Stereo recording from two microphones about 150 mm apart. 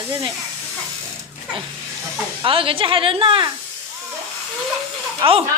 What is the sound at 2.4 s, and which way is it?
Speech, 35° right (ahead or behind).